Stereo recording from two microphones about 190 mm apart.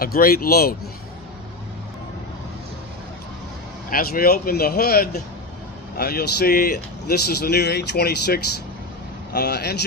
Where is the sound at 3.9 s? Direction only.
50° left (ahead or behind).